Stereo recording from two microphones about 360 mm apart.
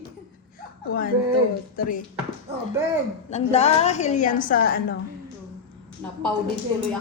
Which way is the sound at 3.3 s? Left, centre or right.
Centre.